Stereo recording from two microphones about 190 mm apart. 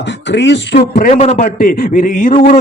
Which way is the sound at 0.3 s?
70° left (ahead or behind).